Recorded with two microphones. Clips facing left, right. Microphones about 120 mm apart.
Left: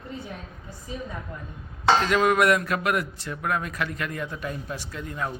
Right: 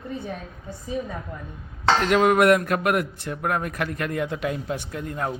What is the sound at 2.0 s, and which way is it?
A man's voice, 50° right (ahead or behind).